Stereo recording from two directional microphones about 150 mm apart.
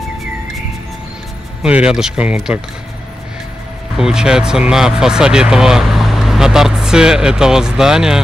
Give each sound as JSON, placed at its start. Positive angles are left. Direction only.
{"t": 1.6, "sound": "speech", "side_deg": -5}
{"t": 4.0, "sound": "speech", "side_deg": -5}